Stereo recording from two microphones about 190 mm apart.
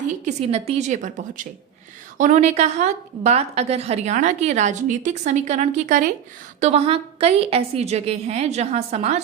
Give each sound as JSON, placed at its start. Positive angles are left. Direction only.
{"t": 0.3, "sound": "a woman's voice", "side_deg": -35}